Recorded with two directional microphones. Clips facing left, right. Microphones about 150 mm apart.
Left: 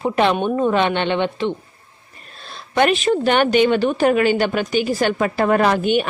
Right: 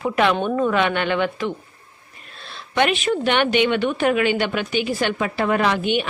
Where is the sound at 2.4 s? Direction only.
40° left (ahead or behind).